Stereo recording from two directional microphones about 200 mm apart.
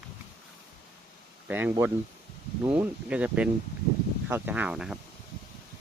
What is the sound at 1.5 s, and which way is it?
Speech, 10° right (ahead or behind).